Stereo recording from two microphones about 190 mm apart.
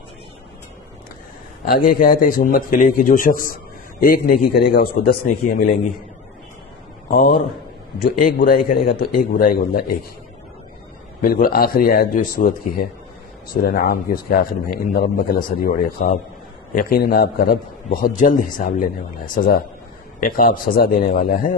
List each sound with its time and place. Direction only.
1.7 s a man's voice: 50° left (ahead or behind)
7.1 s a man's voice: 50° left (ahead or behind)
11.1 s a man's voice: 45° left (ahead or behind)